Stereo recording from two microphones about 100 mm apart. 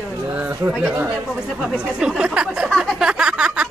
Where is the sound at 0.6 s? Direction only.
20° right (ahead or behind).